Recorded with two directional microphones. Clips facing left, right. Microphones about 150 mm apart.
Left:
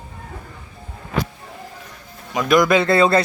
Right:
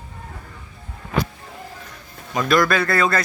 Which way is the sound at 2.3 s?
15° left (ahead or behind).